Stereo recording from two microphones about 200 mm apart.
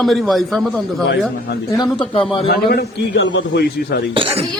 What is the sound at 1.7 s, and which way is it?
Speech, 20° left (ahead or behind).